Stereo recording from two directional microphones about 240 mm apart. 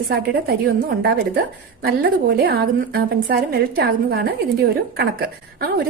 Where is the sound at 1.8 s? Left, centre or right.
Right.